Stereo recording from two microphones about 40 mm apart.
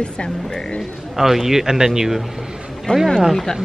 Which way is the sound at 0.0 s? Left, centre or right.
Centre.